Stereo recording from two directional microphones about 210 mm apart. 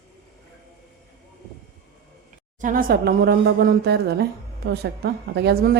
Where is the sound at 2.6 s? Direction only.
40° right (ahead or behind).